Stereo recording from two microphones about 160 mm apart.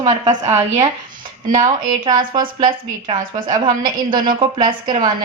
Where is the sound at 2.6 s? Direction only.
25° right (ahead or behind).